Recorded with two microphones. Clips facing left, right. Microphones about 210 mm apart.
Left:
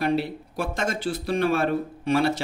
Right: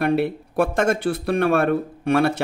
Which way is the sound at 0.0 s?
60° right (ahead or behind).